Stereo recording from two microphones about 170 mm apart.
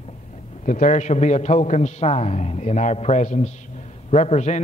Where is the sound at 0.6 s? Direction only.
45° left (ahead or behind).